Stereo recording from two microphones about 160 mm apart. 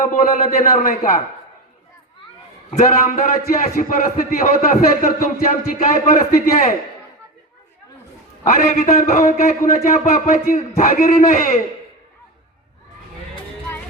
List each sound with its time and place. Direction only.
0.0 s a man's voice: 55° left (ahead or behind)
2.6 s a man's voice: 55° left (ahead or behind)
8.4 s a man's voice: 60° left (ahead or behind)
8.9 s a man's voice: 65° left (ahead or behind)